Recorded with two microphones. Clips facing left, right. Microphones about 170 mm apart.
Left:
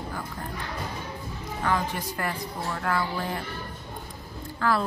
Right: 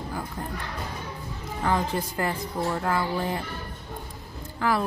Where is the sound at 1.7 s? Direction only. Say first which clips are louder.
Right 2 dB; 25° right (ahead or behind).